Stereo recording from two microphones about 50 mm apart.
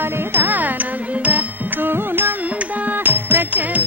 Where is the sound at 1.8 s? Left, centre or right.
Right.